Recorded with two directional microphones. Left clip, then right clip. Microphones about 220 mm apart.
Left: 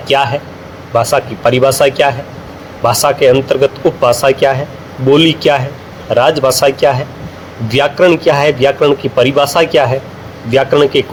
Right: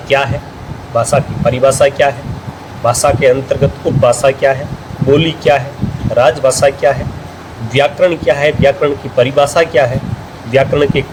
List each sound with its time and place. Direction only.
0.1 s a man's voice: 30° left (ahead or behind)